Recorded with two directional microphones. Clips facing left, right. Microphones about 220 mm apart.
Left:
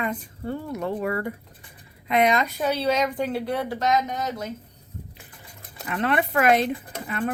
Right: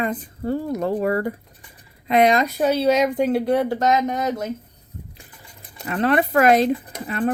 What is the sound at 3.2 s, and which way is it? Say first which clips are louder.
Speech: right 7 dB; 45° right (ahead or behind).